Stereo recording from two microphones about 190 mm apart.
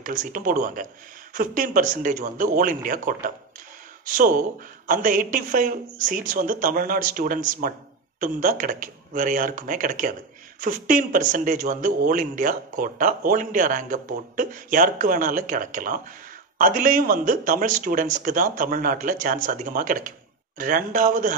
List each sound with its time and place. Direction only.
0.0 s a man's voice: 45° right (ahead or behind)